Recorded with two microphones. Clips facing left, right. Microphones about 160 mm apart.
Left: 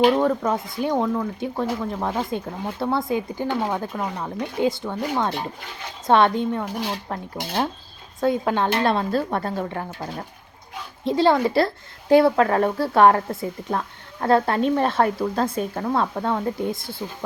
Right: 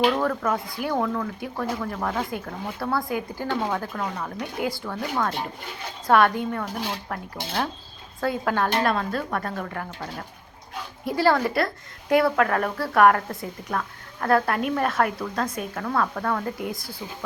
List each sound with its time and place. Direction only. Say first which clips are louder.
0.0 s speech: left 4 dB; 20° left (ahead or behind)